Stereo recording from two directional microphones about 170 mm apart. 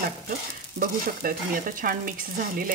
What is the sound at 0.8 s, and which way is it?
Speech, 55° right (ahead or behind).